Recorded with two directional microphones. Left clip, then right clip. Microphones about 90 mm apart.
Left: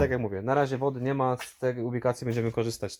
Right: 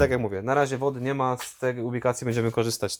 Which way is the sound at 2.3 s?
25° right (ahead or behind).